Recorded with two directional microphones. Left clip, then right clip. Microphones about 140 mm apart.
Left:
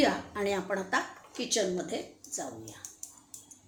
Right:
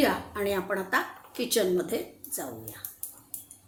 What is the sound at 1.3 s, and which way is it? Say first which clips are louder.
A woman's voice: right 4 dB; 20° right (ahead or behind).